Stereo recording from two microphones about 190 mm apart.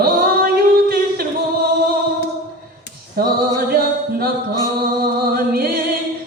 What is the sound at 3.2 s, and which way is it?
A capella, 50° right (ahead or behind).